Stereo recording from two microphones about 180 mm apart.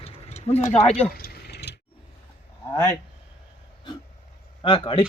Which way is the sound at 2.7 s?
20° left (ahead or behind).